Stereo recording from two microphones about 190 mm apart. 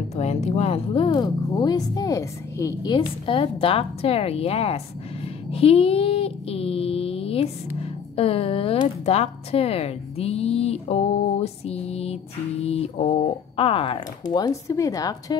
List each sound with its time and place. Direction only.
0.1 s speech: 35° left (ahead or behind)
5.5 s a sound: 30° left (ahead or behind)
8.2 s a woman's voice: 30° left (ahead or behind)